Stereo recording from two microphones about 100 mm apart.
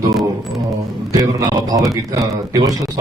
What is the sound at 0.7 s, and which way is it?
A man's voice, 35° right (ahead or behind).